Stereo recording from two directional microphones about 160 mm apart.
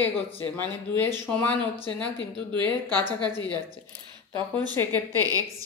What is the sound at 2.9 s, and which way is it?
Speech, 25° right (ahead or behind).